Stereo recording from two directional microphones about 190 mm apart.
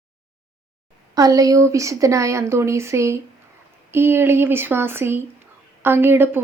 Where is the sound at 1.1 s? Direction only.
20° right (ahead or behind).